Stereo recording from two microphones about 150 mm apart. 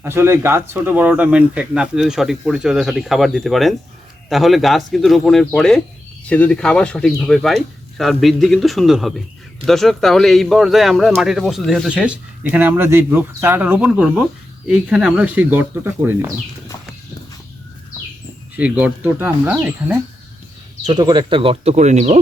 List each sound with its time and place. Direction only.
0.0 s speech: 15° right (ahead or behind)
18.5 s speech: 10° right (ahead or behind)
20.8 s speech: 30° right (ahead or behind); by 22.2 s 50° right (ahead or behind)